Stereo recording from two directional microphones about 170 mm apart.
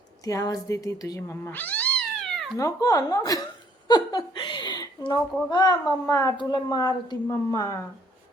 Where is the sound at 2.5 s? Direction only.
20° left (ahead or behind).